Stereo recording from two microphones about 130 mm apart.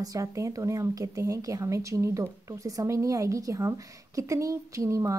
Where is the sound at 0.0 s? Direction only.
25° right (ahead or behind).